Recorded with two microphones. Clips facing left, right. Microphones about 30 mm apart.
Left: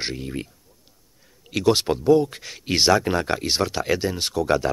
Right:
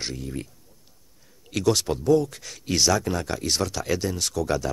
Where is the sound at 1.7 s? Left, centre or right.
Left.